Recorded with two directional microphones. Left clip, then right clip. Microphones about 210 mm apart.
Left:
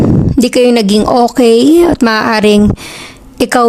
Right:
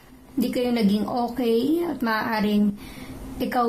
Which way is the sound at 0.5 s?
50° left (ahead or behind).